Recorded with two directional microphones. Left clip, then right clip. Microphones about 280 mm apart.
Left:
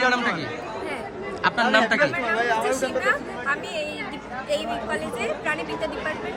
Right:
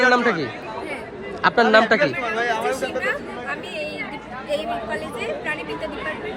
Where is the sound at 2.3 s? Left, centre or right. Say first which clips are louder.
Even; left.